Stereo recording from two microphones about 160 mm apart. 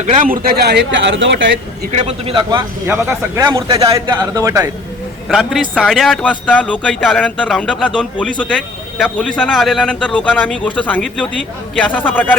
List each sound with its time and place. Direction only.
0.0 s a man's voice: 50° right (ahead or behind); by 1.5 s 90° right
1.9 s a man's voice: 40° right (ahead or behind)
2.8 s a man's voice: 15° right (ahead or behind)
5.3 s a man's voice: centre (ahead or behind)